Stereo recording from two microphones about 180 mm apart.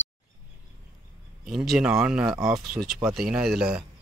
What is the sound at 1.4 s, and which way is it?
Speech, centre (ahead or behind).